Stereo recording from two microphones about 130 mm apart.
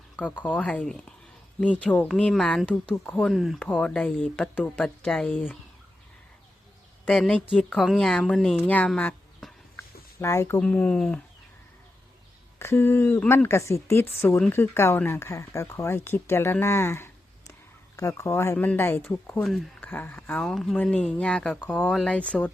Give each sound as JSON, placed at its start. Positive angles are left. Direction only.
{"t": 0.3, "sound": "speech", "side_deg": 10}
{"t": 7.1, "sound": "speech", "side_deg": 5}
{"t": 8.5, "sound": "speech", "side_deg": 10}
{"t": 9.4, "sound": "a sound", "side_deg": 0}
{"t": 9.7, "sound": "a sound", "side_deg": 20}
{"t": 10.6, "sound": "speech", "side_deg": 10}
{"t": 12.5, "sound": "speech", "side_deg": 20}
{"t": 20.4, "sound": "speech", "side_deg": 0}